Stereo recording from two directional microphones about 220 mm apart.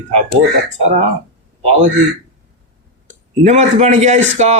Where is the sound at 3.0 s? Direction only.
30° right (ahead or behind).